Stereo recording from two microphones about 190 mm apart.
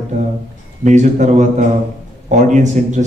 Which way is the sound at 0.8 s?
40° right (ahead or behind).